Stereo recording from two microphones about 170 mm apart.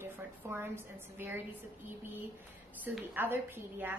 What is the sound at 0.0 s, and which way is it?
A woman's voice, 15° right (ahead or behind).